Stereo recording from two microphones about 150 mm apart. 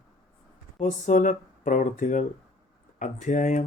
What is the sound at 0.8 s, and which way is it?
Speech, 55° left (ahead or behind).